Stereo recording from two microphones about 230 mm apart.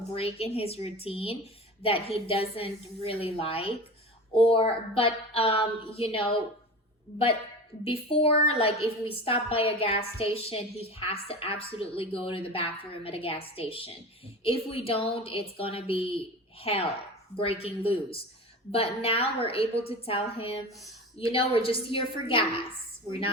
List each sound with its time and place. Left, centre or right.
0.1 s a woman's voice: left
7.9 s a woman's voice: left